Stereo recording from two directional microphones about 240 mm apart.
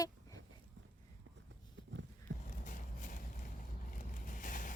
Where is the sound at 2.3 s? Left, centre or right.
Right.